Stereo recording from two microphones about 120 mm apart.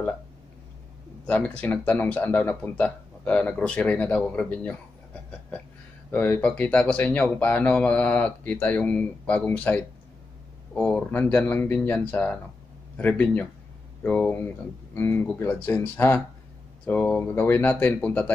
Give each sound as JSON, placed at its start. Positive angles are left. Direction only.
{"t": 1.2, "sound": "speech", "side_deg": 10}
{"t": 6.1, "sound": "speech", "side_deg": 15}